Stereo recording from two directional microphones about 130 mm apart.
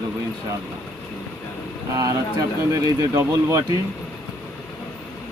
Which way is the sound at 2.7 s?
25° right (ahead or behind).